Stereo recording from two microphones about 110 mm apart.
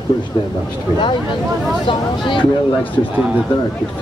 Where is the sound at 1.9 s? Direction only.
50° left (ahead or behind).